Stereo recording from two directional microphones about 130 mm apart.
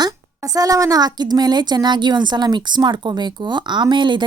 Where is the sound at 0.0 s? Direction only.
30° right (ahead or behind).